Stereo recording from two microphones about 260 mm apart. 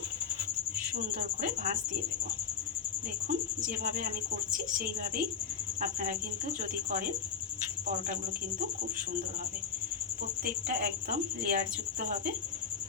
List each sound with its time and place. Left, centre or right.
0.9 s a woman's voice: right
3.8 s a woman's voice: right
5.8 s a woman's voice: right
10.4 s a woman's voice: right